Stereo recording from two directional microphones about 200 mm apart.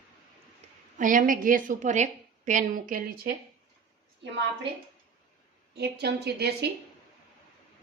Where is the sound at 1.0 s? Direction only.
40° right (ahead or behind).